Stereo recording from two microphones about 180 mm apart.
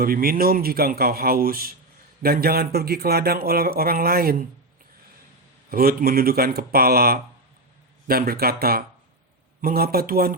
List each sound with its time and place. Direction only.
0.0 s speech: 55° right (ahead or behind)
5.7 s speech: 55° right (ahead or behind)